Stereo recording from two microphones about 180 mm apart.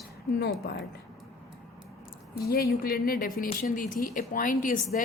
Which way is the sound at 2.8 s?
55° left (ahead or behind).